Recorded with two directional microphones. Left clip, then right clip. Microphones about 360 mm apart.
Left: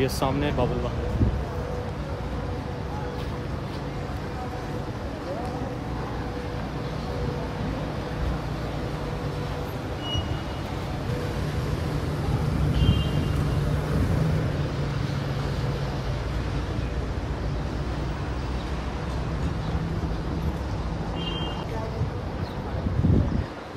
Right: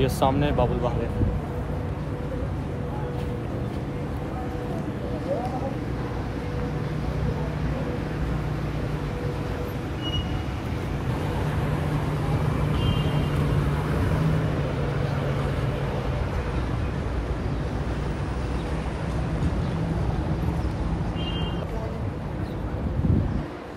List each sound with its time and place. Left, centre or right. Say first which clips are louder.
0.0 s speech: right 2 dB; centre